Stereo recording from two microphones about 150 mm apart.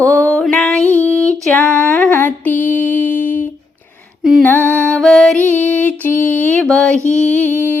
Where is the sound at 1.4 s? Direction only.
10° left (ahead or behind).